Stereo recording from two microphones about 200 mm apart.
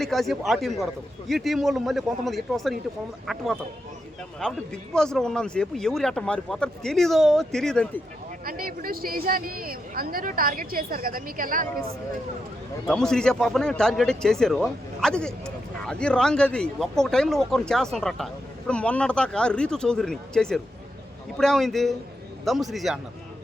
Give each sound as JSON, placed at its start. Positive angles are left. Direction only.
{"t": 0.0, "sound": "speech", "side_deg": 0}
{"t": 8.4, "sound": "speech", "side_deg": -45}
{"t": 12.9, "sound": "speech", "side_deg": 5}